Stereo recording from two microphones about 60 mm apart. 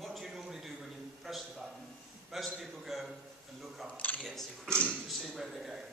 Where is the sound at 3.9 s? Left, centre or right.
Left.